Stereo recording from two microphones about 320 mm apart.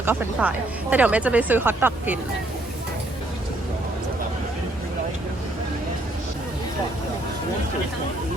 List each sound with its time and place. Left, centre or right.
0.0 s speech: centre